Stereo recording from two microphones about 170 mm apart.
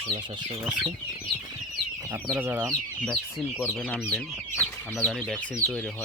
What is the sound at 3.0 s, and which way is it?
Speech, centre (ahead or behind).